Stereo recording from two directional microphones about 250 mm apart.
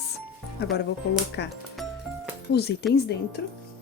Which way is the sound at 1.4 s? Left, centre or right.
Left.